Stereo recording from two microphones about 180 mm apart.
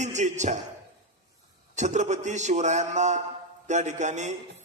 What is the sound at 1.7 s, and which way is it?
A man's voice, 40° right (ahead or behind).